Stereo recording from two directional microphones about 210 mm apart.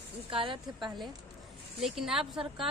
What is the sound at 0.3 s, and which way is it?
Speech, 25° right (ahead or behind).